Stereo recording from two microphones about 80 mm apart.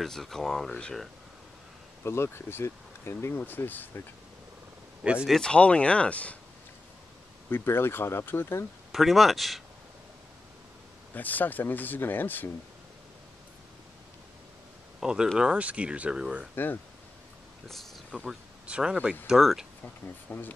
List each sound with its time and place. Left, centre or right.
0.0 s speech: centre
2.0 s speech: left
5.0 s speech: centre
5.3 s speech: centre
7.4 s speech: left
8.9 s speech: centre
11.1 s speech: left
15.0 s speech: centre
16.5 s speech: left
18.1 s speech: centre
20.2 s speech: left